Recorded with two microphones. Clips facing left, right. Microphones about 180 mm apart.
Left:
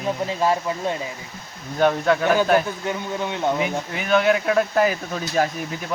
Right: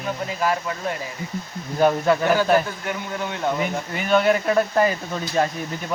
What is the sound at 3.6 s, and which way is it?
Speech, centre (ahead or behind).